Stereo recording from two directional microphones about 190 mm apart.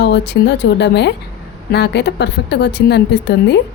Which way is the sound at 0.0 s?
65° left (ahead or behind).